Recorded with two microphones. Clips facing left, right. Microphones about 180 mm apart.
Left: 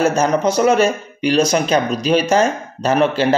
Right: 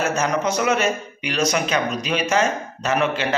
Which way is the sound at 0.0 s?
30° left (ahead or behind).